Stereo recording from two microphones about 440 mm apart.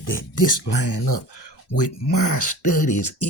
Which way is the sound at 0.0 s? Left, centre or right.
Left.